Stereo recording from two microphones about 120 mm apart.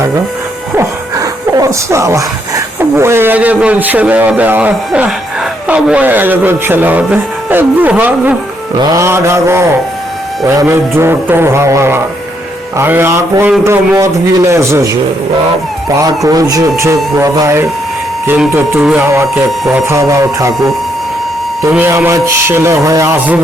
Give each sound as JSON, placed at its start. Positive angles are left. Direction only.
{"t": 0.8, "sound": "speech", "side_deg": -30}
{"t": 8.8, "sound": "speech", "side_deg": -30}
{"t": 16.0, "sound": "speech", "side_deg": -30}
{"t": 19.0, "sound": "speech", "side_deg": -20}
{"t": 21.6, "sound": "speech", "side_deg": -20}